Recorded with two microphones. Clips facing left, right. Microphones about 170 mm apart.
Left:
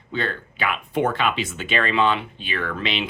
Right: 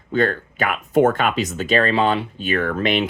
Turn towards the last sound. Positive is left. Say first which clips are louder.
# right 7 dB
turn(degrees=-50)  # may be behind; listen again after turning